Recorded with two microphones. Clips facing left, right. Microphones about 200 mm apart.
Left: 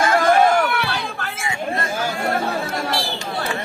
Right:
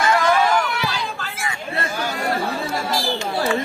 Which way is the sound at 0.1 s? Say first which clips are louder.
Left 2 dB; 50° left (ahead or behind).